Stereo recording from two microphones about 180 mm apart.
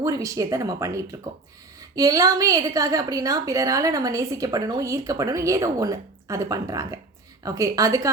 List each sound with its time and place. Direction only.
0.0 s a woman's voice: 20° right (ahead or behind)